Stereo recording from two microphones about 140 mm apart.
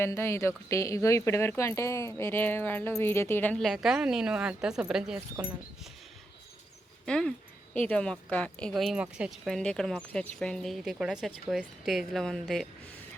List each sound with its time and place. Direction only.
0.0 s speech: 20° left (ahead or behind)
3.6 s speech: centre (ahead or behind)
7.0 s speech: 5° left (ahead or behind)